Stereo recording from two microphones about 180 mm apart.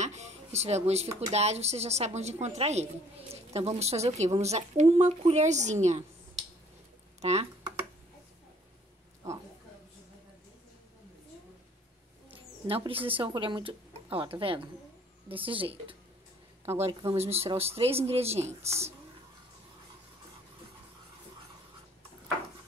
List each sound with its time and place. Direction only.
0.0 s a sound: 40° right (ahead or behind)
1.3 s a woman's voice: 35° right (ahead or behind)
7.2 s speech: 35° right (ahead or behind)
12.6 s a woman's voice: 30° right (ahead or behind)